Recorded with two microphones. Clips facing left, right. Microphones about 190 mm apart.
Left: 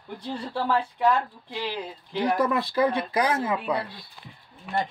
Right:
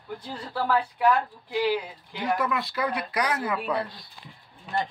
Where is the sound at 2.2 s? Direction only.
35° left (ahead or behind).